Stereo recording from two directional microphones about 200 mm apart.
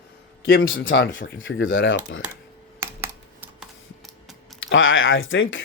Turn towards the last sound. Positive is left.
turn(degrees=75)  # may be behind; listen again after turning